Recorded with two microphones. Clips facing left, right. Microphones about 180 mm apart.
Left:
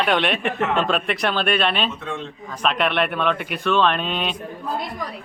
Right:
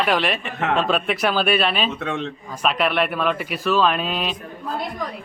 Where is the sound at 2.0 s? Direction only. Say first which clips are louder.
Right 4 dB; 70° right (ahead or behind).